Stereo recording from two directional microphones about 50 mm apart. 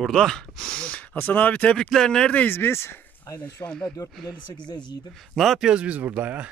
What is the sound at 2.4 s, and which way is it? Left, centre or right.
Speech, left.